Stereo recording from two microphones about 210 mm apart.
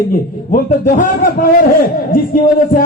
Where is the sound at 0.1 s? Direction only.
35° left (ahead or behind).